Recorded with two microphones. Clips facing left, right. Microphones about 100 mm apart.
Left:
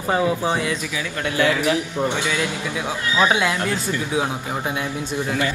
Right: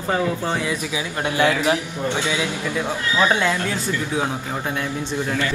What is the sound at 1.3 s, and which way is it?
Speech, 20° right (ahead or behind).